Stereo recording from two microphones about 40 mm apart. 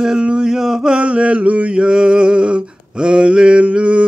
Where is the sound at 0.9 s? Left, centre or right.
Right.